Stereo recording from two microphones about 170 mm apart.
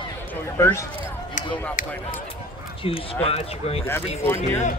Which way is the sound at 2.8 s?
35° left (ahead or behind).